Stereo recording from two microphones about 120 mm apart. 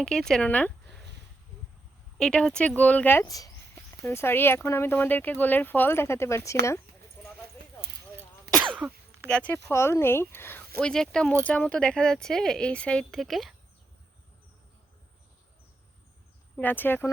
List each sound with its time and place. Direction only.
0.0 s speech: 5° left (ahead or behind)
2.1 s speech: 5° left (ahead or behind)
3.2 s speech: 30° left (ahead or behind)
9.2 s speech: 10° left (ahead or behind)
10.8 s speech: 5° left (ahead or behind)
16.6 s speech: 15° left (ahead or behind)